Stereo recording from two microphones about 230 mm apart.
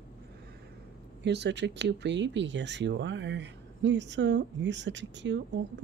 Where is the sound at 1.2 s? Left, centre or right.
Right.